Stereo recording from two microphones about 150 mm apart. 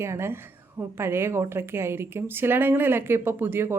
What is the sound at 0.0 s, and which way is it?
Speech, 15° right (ahead or behind).